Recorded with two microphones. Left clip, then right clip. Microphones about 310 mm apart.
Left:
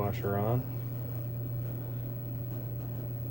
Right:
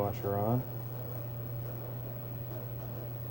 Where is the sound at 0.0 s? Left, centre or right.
Right.